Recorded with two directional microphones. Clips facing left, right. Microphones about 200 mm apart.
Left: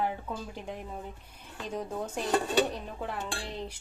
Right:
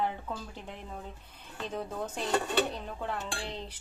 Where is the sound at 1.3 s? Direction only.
10° left (ahead or behind).